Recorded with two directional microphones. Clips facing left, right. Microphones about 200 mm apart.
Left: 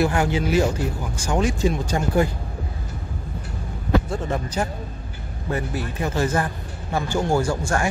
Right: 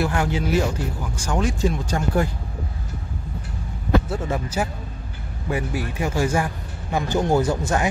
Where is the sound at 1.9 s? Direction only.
5° left (ahead or behind).